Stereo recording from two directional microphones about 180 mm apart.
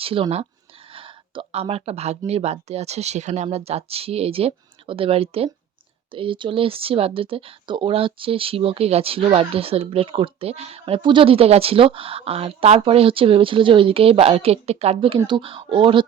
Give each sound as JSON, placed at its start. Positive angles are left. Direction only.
{"t": 0.0, "sound": "speech", "side_deg": -30}